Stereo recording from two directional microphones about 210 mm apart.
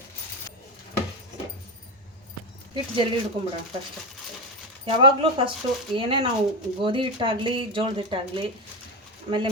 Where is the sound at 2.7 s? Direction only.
25° right (ahead or behind).